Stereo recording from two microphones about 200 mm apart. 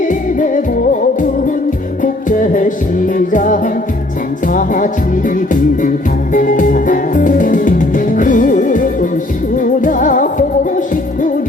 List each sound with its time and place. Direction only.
0.1 s music: 40° left (ahead or behind)
2.0 s music: 40° left (ahead or behind)